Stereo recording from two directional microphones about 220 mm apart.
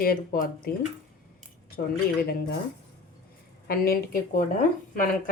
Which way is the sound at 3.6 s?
45° left (ahead or behind).